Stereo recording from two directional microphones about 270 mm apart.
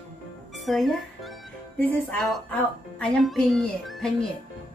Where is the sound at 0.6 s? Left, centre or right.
Centre.